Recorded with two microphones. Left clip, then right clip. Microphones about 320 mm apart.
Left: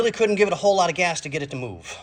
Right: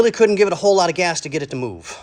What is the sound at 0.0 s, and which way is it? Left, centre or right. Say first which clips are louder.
Speech: right 7 dB; right.